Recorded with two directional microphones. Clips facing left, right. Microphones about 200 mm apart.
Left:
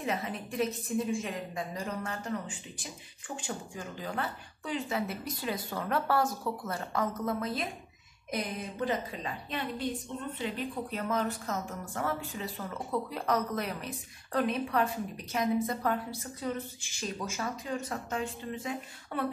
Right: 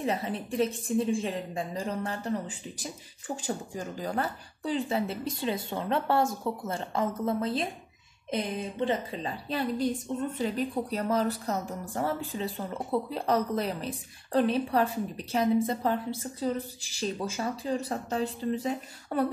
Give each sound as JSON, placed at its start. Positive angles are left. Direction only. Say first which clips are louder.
{"t": 0.0, "sound": "a woman's voice", "louder": "right 4 dB", "side_deg": -30}